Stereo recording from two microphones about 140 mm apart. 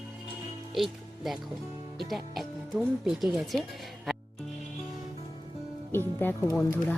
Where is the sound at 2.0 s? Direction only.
Centre (ahead or behind).